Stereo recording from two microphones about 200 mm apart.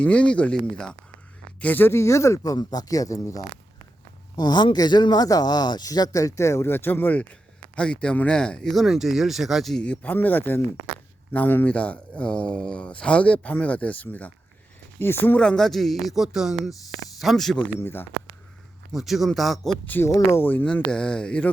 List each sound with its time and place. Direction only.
0.0 s speech: 5° left (ahead or behind)
17.7 s speech: 10° left (ahead or behind)
18.9 s speech: centre (ahead or behind)
19.9 s speech: 15° left (ahead or behind)